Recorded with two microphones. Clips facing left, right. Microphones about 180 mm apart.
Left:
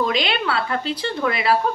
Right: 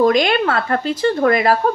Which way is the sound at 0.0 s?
45° right (ahead or behind).